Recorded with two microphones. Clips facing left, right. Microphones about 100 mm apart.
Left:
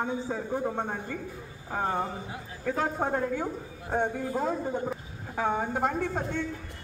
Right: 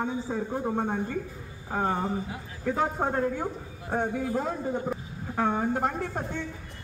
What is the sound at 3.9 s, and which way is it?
A man's voice, centre (ahead or behind).